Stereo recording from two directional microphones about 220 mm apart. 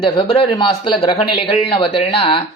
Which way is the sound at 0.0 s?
20° left (ahead or behind).